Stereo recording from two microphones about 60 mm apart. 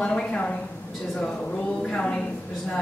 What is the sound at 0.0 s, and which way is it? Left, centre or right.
Speech, centre.